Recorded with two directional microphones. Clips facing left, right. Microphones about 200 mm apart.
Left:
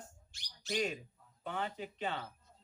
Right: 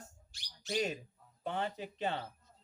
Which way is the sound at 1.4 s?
35° right (ahead or behind).